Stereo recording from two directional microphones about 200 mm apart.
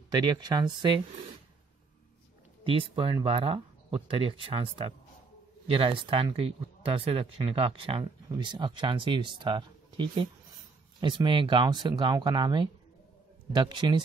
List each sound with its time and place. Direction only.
0.1 s speech: 20° right (ahead or behind)
2.6 s speech: 25° right (ahead or behind)